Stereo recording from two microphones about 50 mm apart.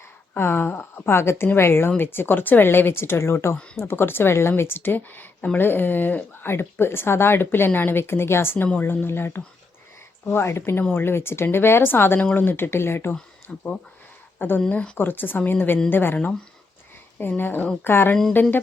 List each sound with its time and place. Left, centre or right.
0.3 s speech: left
6.5 s speech: left
13.5 s speech: centre
14.3 s speech: left
17.2 s speech: left